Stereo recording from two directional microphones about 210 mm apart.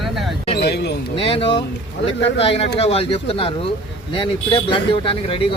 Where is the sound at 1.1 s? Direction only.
25° left (ahead or behind).